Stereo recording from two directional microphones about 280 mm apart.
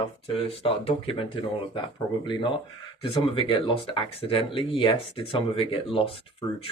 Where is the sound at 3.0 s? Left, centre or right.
Centre.